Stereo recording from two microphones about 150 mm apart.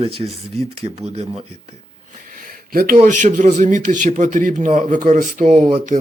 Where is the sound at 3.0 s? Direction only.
55° right (ahead or behind).